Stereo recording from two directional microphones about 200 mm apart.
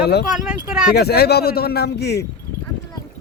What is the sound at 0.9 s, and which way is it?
A man's voice, 55° left (ahead or behind).